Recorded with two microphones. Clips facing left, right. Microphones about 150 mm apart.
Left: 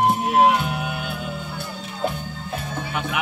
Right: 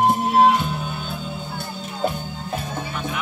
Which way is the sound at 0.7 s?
75° left (ahead or behind).